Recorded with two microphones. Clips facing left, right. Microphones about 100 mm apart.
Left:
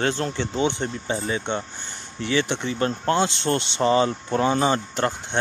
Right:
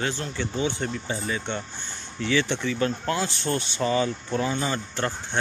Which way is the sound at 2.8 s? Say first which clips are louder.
Left 7 dB; 35° left (ahead or behind).